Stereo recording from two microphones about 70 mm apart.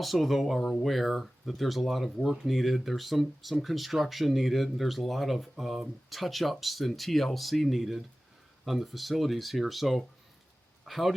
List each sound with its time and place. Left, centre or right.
0.0 s speech: centre